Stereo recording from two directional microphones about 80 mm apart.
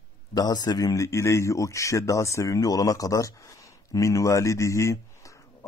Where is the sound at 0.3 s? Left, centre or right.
Left.